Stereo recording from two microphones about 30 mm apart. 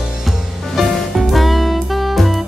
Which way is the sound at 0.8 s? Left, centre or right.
Centre.